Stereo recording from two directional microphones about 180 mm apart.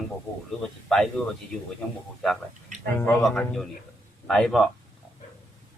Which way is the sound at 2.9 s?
15° left (ahead or behind).